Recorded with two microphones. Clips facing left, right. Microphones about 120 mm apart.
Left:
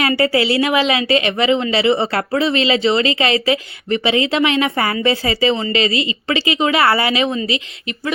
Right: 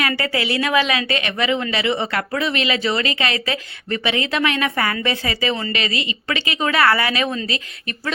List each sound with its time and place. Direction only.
0.0 s speech: 25° left (ahead or behind)